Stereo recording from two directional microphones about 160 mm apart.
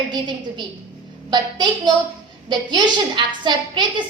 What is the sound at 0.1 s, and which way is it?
A woman's voice, 30° right (ahead or behind).